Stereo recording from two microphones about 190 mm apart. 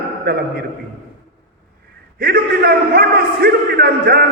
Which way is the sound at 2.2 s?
50° right (ahead or behind).